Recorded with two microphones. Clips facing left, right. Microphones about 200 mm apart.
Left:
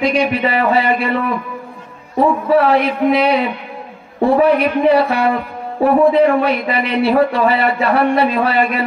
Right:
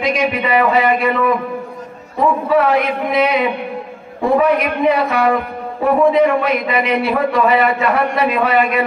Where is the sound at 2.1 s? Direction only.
30° left (ahead or behind).